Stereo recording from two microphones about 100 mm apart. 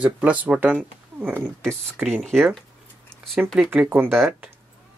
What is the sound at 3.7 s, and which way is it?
Speech, 20° right (ahead or behind).